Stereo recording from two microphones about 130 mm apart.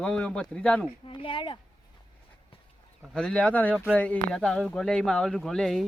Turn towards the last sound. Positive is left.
turn(degrees=5)  # may be behind; listen again after turning